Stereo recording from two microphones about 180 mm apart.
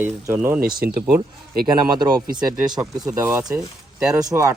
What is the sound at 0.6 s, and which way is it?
Speech, 55° right (ahead or behind).